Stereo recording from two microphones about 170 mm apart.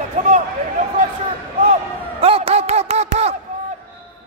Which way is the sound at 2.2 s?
35° right (ahead or behind).